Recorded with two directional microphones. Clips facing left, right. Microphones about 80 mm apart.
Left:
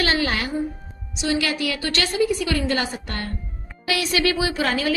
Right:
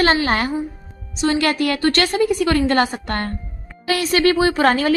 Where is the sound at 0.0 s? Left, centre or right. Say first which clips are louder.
Right 5 dB; right.